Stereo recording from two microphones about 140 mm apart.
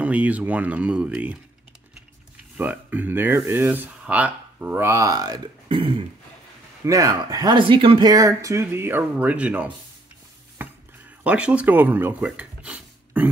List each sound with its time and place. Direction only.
0.0 s speech: 10° right (ahead or behind)
2.5 s speech: 10° right (ahead or behind); by 6.0 s 35° right (ahead or behind)
6.8 s speech: 25° right (ahead or behind)
8.1 s speech: 25° right (ahead or behind)
10.6 s a sound: 15° right (ahead or behind)
11.2 s speech: 10° right (ahead or behind)